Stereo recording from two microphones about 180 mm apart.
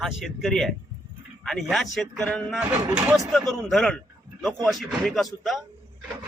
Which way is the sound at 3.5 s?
Centre (ahead or behind).